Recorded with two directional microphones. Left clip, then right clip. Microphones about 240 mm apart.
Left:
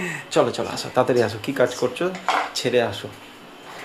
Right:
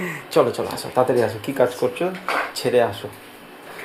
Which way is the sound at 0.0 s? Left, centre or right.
Centre.